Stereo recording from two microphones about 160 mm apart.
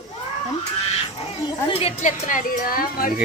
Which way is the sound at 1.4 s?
35° left (ahead or behind).